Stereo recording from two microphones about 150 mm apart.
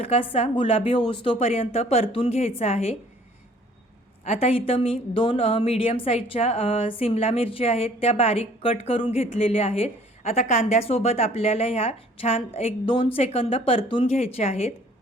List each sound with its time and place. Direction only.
0.0 s a woman's voice: 40° left (ahead or behind)
4.3 s a woman's voice: 40° left (ahead or behind)